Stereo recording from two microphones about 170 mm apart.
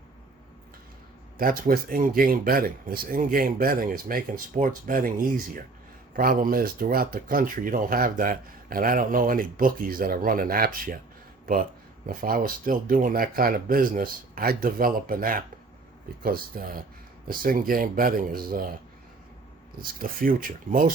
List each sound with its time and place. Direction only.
1.4 s speech: 60° right (ahead or behind)
6.1 s speech: 55° right (ahead or behind)
12.0 s speech: 55° right (ahead or behind)
19.8 s speech: 55° right (ahead or behind)